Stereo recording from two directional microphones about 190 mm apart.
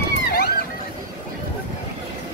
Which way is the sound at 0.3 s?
50° left (ahead or behind).